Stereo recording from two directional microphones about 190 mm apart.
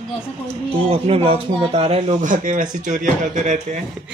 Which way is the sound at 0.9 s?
30° right (ahead or behind).